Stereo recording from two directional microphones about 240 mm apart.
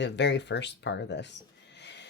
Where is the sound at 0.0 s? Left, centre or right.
Left.